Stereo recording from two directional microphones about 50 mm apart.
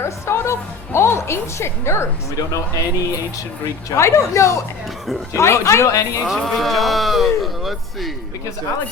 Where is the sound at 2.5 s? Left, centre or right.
Left.